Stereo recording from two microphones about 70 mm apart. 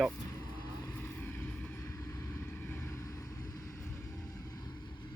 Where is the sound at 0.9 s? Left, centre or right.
Left.